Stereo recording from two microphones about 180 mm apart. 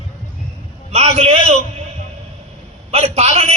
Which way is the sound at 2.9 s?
35° right (ahead or behind).